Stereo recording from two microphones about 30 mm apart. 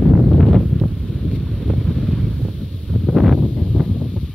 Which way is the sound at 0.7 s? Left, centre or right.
Centre.